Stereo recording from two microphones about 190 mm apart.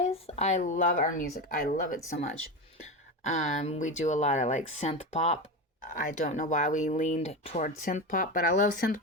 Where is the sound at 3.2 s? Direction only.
35° left (ahead or behind).